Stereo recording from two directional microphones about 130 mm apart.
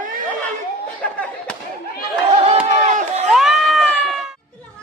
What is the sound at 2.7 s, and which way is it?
Chop, 65° right (ahead or behind).